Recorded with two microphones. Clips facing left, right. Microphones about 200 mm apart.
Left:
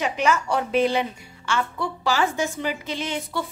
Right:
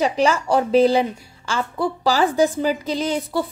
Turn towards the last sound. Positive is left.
turn(degrees=-35)  # may be behind; listen again after turning